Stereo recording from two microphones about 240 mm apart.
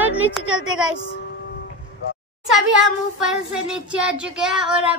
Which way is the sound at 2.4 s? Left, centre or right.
Centre.